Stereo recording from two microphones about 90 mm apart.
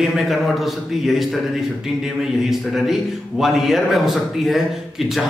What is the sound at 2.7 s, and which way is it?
A man's voice, 5° right (ahead or behind).